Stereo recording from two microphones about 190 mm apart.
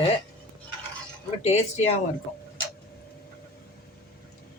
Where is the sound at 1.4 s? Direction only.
35° left (ahead or behind).